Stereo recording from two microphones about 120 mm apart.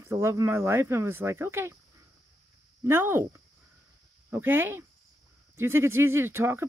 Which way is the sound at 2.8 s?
20° right (ahead or behind).